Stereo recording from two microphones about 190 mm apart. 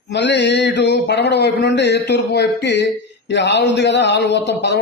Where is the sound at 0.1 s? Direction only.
65° left (ahead or behind).